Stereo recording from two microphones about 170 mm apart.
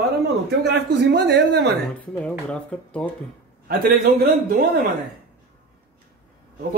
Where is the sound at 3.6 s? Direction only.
65° right (ahead or behind).